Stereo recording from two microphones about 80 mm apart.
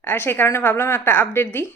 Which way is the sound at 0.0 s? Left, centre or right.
Left.